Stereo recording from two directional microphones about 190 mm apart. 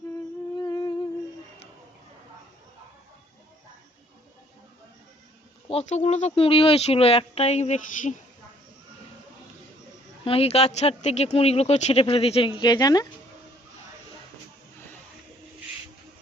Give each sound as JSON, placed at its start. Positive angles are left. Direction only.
{"t": 0.5, "sound": "music", "side_deg": 20}
{"t": 5.6, "sound": "speech", "side_deg": 35}
{"t": 10.2, "sound": "speech", "side_deg": 30}